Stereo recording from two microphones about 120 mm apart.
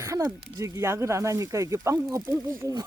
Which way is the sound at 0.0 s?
25° right (ahead or behind).